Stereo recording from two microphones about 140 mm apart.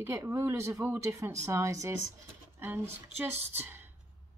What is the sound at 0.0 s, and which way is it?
Speech, 20° right (ahead or behind).